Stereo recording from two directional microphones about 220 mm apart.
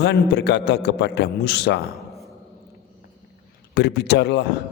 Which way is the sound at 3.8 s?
50° left (ahead or behind).